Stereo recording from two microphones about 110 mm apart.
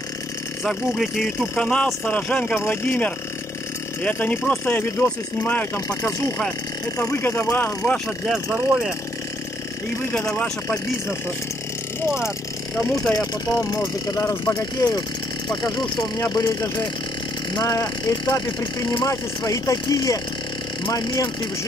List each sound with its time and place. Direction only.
0.7 s speech: centre (ahead or behind); by 7.7 s 20° left (ahead or behind)
7.8 s speech: 5° left (ahead or behind)
10.1 s speech: 10° left (ahead or behind)
13.1 s speech: 35° left (ahead or behind)